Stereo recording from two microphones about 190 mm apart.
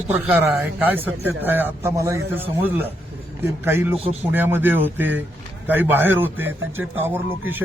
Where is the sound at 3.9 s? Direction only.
30° right (ahead or behind).